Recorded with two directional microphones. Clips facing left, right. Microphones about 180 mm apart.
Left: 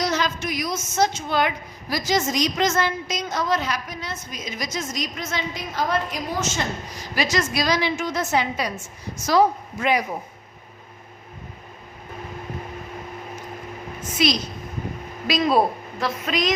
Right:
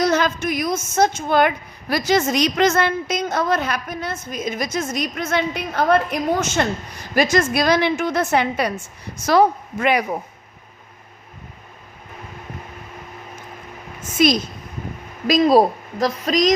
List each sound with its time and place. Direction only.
0.0 s a woman's voice: 55° right (ahead or behind)
14.2 s a woman's voice: 50° right (ahead or behind)
15.3 s a woman's voice: 40° right (ahead or behind)